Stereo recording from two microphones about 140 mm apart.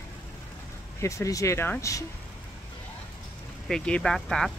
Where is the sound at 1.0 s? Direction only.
20° left (ahead or behind).